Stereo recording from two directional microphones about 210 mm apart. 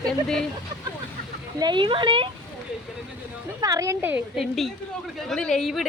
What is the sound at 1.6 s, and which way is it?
Speech, 20° right (ahead or behind).